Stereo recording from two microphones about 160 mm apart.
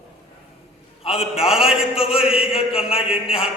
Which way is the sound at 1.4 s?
Centre (ahead or behind).